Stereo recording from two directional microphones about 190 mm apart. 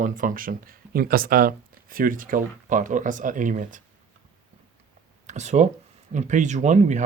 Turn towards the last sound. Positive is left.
turn(degrees=-40)  # may be behind; listen again after turning